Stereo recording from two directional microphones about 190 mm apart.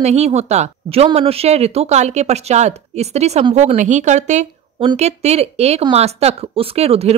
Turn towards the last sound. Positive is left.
turn(degrees=-30)  # may be behind; listen again after turning